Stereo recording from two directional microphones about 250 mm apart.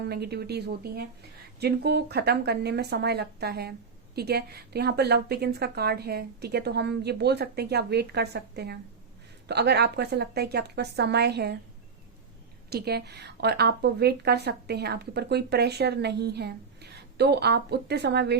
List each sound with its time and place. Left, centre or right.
0.0 s speech: right
12.7 s speech: right